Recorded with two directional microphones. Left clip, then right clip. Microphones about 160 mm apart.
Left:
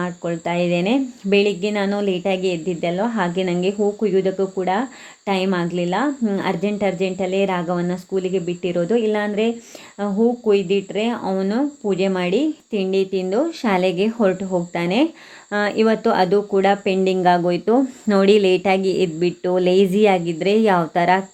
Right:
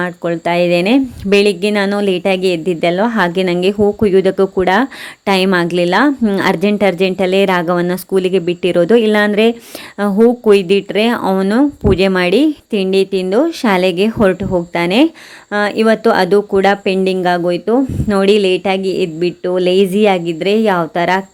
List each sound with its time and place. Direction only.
0.0 s a woman's voice: 30° right (ahead or behind)